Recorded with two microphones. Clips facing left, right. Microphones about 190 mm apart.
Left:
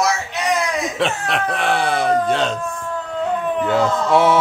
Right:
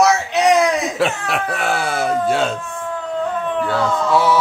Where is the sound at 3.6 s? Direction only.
20° left (ahead or behind).